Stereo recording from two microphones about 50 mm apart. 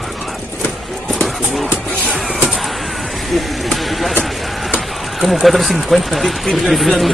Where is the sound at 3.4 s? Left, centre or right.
Centre.